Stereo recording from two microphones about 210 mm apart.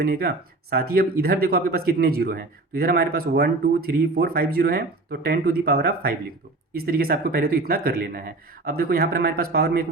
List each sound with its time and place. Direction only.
0.0 s speech: 45° right (ahead or behind)